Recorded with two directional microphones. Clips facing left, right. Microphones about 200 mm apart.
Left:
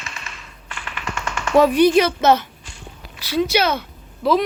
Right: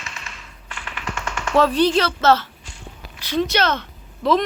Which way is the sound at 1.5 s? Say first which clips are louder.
Left 4 dB; 15° left (ahead or behind).